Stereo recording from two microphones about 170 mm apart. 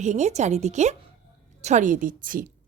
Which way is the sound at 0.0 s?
45° right (ahead or behind).